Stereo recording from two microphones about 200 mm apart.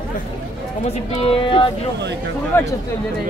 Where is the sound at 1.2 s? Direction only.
25° left (ahead or behind).